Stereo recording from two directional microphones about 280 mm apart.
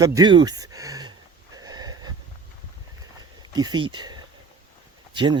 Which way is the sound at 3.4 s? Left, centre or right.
Centre.